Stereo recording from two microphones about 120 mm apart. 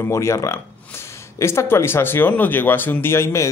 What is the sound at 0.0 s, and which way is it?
Speech, 25° left (ahead or behind).